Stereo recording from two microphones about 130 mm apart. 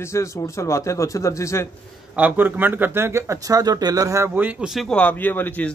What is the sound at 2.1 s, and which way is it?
Speech, 15° right (ahead or behind).